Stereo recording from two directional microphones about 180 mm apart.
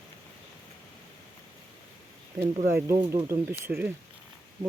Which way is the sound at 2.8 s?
15° right (ahead or behind).